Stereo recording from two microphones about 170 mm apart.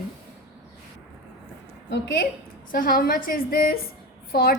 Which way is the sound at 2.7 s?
55° left (ahead or behind).